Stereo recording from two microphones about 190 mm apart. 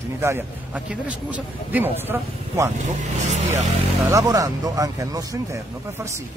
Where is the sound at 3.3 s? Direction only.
35° right (ahead or behind).